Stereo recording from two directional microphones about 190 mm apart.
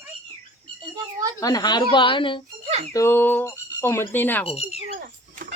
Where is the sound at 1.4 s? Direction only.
20° left (ahead or behind).